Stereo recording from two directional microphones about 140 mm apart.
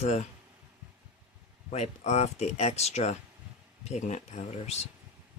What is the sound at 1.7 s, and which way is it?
Speech, 50° left (ahead or behind).